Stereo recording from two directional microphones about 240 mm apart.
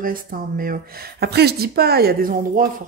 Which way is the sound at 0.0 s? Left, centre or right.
Right.